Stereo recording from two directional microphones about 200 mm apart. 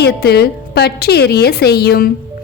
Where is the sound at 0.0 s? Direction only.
55° left (ahead or behind).